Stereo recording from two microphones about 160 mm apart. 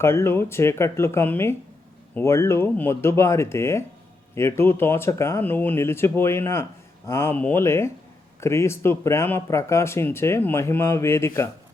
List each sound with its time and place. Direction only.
0.0 s speech: 15° left (ahead or behind)